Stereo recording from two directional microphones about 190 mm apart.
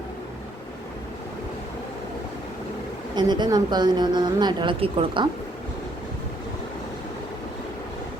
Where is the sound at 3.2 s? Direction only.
20° right (ahead or behind).